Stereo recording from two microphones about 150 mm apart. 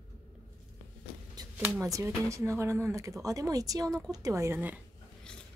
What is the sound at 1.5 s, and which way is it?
Speech, 15° right (ahead or behind).